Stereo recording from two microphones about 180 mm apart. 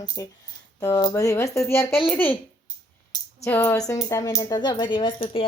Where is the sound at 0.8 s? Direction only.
20° left (ahead or behind).